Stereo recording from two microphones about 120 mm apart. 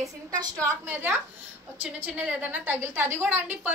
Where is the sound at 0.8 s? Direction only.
15° right (ahead or behind).